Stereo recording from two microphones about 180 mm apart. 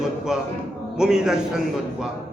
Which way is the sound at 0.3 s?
5° right (ahead or behind).